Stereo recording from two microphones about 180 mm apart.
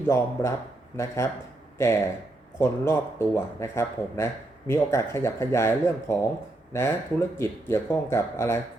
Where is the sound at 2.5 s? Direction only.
15° left (ahead or behind).